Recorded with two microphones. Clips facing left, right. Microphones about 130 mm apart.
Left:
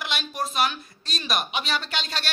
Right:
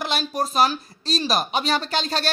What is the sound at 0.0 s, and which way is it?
A woman's voice, 40° right (ahead or behind).